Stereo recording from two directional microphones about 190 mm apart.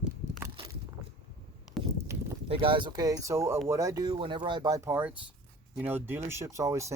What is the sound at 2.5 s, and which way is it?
Speech, 25° right (ahead or behind).